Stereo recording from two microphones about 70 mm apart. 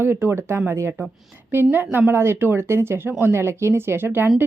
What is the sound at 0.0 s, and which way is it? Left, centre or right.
Speech, right.